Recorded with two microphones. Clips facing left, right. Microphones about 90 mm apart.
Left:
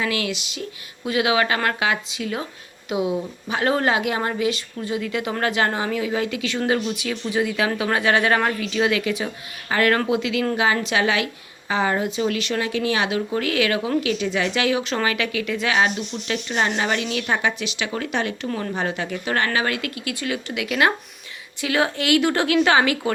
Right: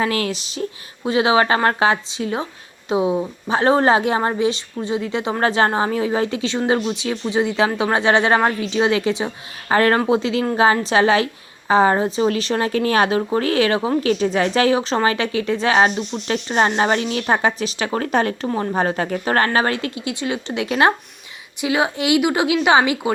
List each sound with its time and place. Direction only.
0.0 s a woman's voice: 40° right (ahead or behind)
18.4 s speech: 30° right (ahead or behind)
18.7 s a woman's voice: 40° right (ahead or behind)
21.6 s a woman's voice: 20° right (ahead or behind)